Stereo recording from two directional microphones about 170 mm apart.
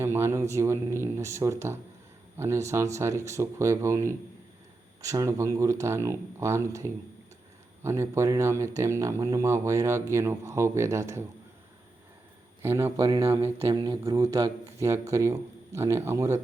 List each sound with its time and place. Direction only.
0.0 s speech: 15° right (ahead or behind)
12.6 s speech: 15° right (ahead or behind)
13.6 s speech: 30° right (ahead or behind)
13.8 s speech: 20° right (ahead or behind)